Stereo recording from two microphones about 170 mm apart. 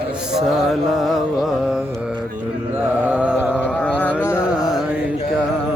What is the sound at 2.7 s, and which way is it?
Music, 10° right (ahead or behind).